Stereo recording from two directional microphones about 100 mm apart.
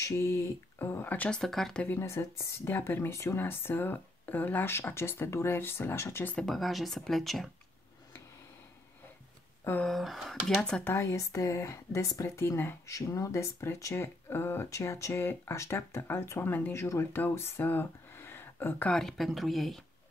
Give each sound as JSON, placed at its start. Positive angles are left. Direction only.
{"t": 0.0, "sound": "speech", "side_deg": 30}
{"t": 1.4, "sound": "speech", "side_deg": 5}
{"t": 1.9, "sound": "speech", "side_deg": 25}
{"t": 6.3, "sound": "speech", "side_deg": 0}
{"t": 9.8, "sound": "speech", "side_deg": 0}
{"t": 11.0, "sound": "speech", "side_deg": 35}
{"t": 18.9, "sound": "speech", "side_deg": 5}